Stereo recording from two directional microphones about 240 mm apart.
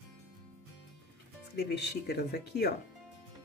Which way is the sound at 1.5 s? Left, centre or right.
Left.